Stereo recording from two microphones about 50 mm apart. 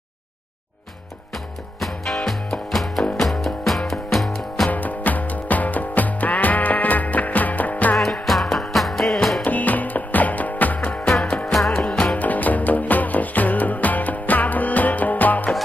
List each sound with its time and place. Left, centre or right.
1.3 s music: centre
4.6 s music: left
8.3 s music: centre
9.4 s music: left
11.4 s music: centre
12.1 s music: left